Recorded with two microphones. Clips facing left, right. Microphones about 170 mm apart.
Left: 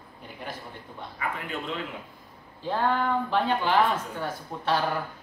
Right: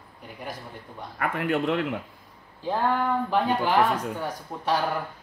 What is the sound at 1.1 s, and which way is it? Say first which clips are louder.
Speech: right 8 dB; 65° right (ahead or behind).